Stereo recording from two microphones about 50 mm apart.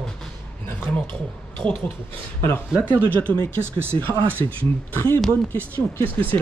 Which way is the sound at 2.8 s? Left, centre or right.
Left.